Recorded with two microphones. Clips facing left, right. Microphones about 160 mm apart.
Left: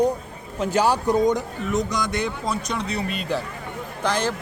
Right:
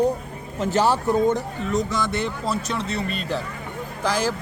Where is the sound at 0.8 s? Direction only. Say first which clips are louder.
Even; 15° left (ahead or behind).